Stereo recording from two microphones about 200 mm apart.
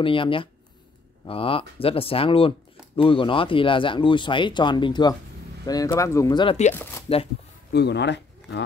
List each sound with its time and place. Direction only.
0.0 s speech: 25° left (ahead or behind)
6.7 s speech: 10° left (ahead or behind)
7.7 s speech: 55° left (ahead or behind)